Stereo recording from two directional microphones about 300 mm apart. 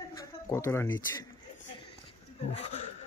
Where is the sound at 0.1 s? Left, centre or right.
Centre.